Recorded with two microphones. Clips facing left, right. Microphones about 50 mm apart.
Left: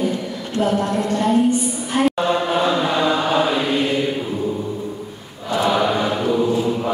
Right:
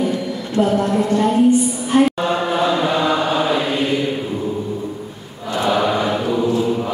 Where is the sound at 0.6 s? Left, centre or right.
Right.